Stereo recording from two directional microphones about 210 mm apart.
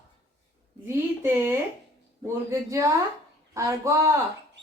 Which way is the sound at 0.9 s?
10° right (ahead or behind).